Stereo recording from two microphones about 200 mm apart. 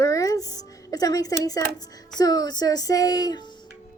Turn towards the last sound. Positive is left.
turn(degrees=20)  # may be behind; listen again after turning